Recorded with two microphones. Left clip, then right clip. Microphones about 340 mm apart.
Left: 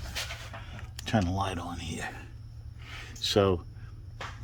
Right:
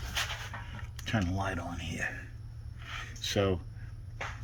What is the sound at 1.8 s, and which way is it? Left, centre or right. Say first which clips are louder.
Speech: right 1 dB; left.